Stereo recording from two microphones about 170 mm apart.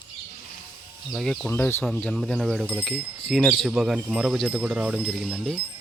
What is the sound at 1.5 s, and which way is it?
Speech, 15° left (ahead or behind).